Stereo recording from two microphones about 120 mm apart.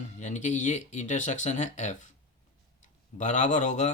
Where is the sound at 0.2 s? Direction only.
85° left.